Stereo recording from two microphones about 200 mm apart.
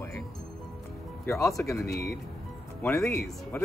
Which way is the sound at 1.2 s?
Centre (ahead or behind).